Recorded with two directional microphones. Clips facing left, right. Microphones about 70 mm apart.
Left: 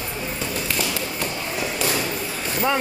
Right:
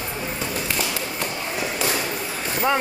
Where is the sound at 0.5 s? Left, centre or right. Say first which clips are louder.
Left 1 dB; centre.